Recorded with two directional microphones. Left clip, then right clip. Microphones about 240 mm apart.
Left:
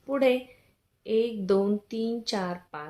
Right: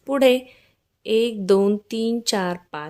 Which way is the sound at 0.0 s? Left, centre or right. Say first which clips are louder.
Right 7 dB; right.